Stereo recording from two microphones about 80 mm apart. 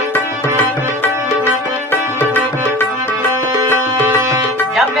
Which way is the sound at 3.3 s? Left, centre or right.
Right.